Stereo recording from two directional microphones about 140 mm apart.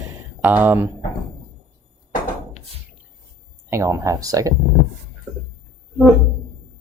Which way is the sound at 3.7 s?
20° right (ahead or behind).